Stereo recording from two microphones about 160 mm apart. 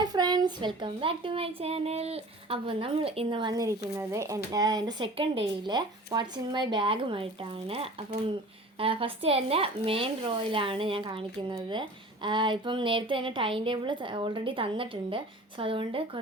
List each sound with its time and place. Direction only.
0.0 s speech: 25° right (ahead or behind)
8.8 s speech: 35° right (ahead or behind)